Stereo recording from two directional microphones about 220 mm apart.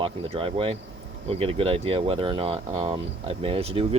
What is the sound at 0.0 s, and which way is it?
Speech, 25° right (ahead or behind).